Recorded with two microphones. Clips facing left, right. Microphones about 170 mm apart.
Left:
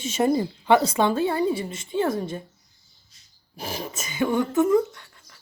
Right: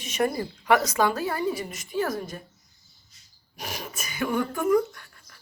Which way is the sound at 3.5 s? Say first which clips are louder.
Left 4 dB; 30° left (ahead or behind).